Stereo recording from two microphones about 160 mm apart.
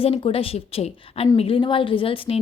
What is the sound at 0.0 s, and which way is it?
A woman's voice, 35° left (ahead or behind).